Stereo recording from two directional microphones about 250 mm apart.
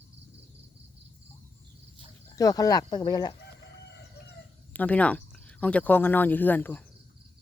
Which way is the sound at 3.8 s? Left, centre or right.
Left.